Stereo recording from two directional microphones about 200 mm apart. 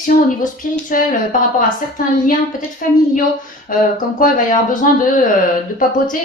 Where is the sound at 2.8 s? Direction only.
45° left (ahead or behind).